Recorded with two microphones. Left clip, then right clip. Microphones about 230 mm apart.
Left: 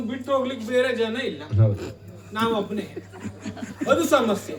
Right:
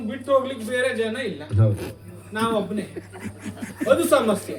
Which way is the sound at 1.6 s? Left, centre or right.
Right.